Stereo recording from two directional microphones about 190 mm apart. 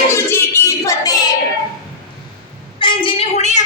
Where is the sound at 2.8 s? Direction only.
25° left (ahead or behind).